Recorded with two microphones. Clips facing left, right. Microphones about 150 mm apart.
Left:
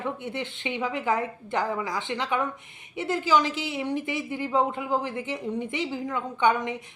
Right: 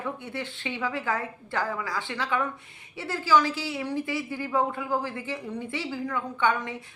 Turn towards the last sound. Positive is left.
turn(degrees=20)  # may be behind; listen again after turning